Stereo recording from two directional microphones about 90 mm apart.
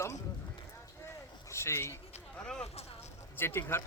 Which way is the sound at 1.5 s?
30° left (ahead or behind).